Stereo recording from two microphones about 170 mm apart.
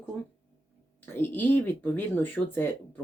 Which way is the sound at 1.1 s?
10° left (ahead or behind).